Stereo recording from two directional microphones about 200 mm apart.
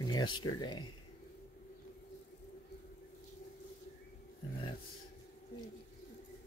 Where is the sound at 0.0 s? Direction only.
20° left (ahead or behind).